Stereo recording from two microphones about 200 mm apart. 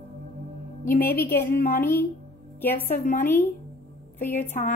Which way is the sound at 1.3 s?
50° left (ahead or behind).